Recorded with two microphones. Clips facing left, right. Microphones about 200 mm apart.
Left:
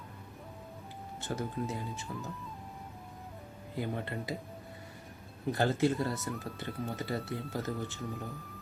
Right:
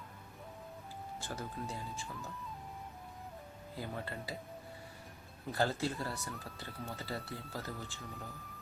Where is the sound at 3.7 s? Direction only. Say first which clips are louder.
Left 6 dB; 20° left (ahead or behind).